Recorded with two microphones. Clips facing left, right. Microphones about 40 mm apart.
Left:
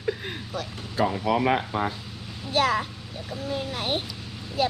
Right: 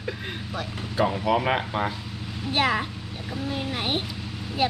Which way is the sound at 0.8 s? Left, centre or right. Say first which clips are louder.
Right 1 dB; right.